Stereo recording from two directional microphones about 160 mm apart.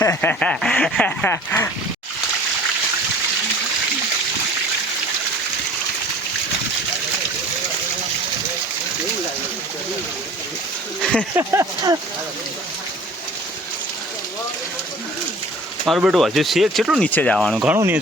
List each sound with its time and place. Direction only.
0.0 s speech: 15° left (ahead or behind)
11.0 s speech: 5° left (ahead or behind)
11.3 s speech: 20° right (ahead or behind)
16.0 s speech: centre (ahead or behind)
17.0 s speech: 10° left (ahead or behind)
17.7 s speech: 10° right (ahead or behind)